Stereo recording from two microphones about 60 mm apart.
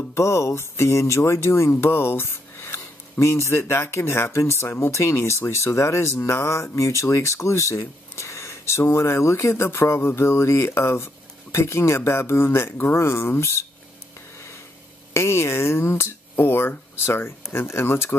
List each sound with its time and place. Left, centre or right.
0.1 s speech: left
15.1 s speech: left
16.3 s speech: left